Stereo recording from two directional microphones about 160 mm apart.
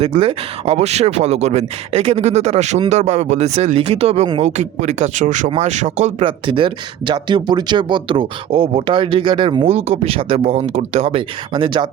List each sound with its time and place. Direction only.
0.0 s speech: 35° right (ahead or behind)
6.2 s speech: 30° right (ahead or behind)